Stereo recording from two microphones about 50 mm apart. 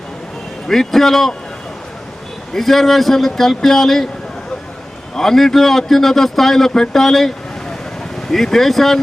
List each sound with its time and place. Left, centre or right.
0.7 s speech: centre
2.5 s speech: centre
5.1 s speech: centre